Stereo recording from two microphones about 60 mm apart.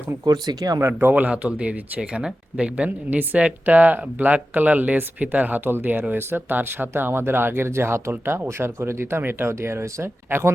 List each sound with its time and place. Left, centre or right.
0.3 s speech: right
0.9 s speech: right
1.3 s speech: centre; by 10.5 s right